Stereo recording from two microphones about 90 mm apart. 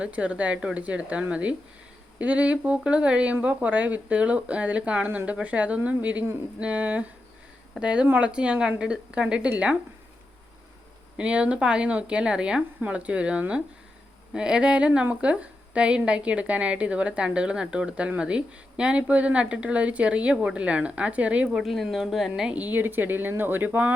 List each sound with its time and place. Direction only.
0.0 s a woman's voice: 15° right (ahead or behind)
11.2 s a woman's voice: 15° right (ahead or behind)
21.5 s a woman's voice: centre (ahead or behind)
22.7 s speech: 20° right (ahead or behind)